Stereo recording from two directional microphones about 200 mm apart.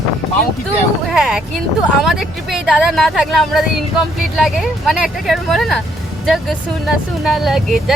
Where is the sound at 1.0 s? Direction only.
Centre (ahead or behind).